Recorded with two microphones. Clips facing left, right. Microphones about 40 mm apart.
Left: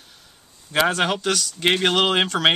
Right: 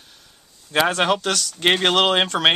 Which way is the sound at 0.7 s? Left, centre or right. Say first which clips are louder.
Right 1 dB; centre.